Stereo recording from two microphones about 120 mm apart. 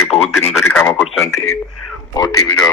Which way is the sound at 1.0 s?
Centre (ahead or behind).